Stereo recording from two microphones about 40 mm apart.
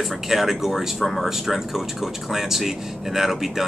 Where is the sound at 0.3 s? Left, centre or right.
Centre.